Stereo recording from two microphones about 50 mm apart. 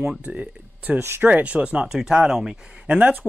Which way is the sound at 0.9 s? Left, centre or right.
Right.